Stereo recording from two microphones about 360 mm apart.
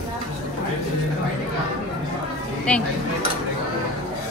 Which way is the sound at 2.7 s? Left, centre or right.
Centre.